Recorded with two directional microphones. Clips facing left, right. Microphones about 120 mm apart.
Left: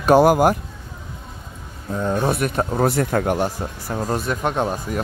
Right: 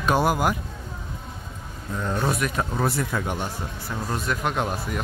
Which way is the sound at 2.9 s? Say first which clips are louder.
Left 7 dB; 50° left (ahead or behind).